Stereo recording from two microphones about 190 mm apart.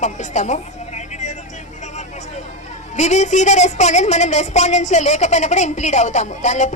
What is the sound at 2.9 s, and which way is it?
A woman's voice, 40° left (ahead or behind).